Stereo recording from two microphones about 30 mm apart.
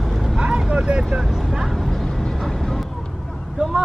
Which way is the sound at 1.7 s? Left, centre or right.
Centre.